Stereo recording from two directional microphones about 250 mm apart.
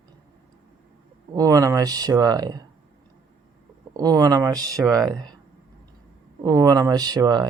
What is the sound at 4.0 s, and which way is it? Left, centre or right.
Speech, centre.